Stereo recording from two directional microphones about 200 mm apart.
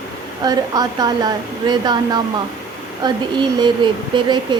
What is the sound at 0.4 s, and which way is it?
Speech, 20° right (ahead or behind).